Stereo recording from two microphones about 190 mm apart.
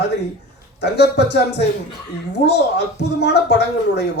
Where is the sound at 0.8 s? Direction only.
65° left (ahead or behind).